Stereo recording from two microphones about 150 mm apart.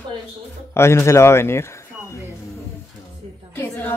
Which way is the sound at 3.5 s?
15° left (ahead or behind).